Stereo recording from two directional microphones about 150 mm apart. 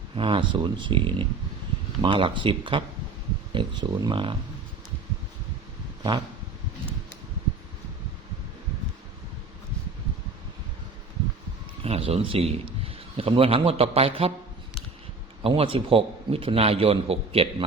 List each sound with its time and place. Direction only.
0.2 s a man's voice: 35° right (ahead or behind)
6.0 s a sound: 30° right (ahead or behind)
11.8 s a man's voice: 40° right (ahead or behind)
15.4 s a man's voice: 40° right (ahead or behind)